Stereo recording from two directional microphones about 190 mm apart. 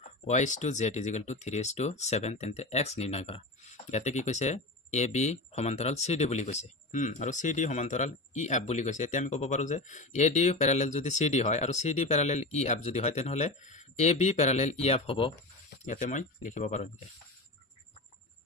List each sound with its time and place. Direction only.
0.3 s speech: 40° left (ahead or behind)
15.8 s speech: 40° left (ahead or behind)